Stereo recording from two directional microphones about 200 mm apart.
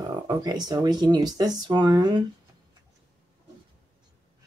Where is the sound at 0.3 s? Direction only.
20° right (ahead or behind).